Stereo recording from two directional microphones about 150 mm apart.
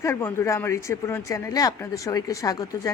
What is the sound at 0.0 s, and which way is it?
Speech, 15° left (ahead or behind).